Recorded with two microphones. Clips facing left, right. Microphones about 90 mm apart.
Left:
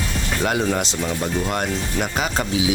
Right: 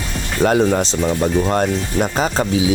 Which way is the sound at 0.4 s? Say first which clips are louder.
Right 7 dB; 35° right (ahead or behind).